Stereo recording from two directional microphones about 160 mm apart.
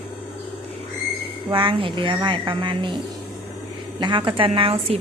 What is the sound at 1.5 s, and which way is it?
A woman's voice, 35° right (ahead or behind).